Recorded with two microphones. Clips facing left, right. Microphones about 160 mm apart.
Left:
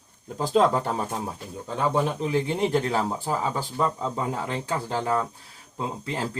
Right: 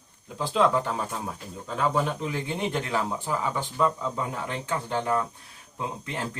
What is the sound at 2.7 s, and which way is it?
Speech, 35° left (ahead or behind).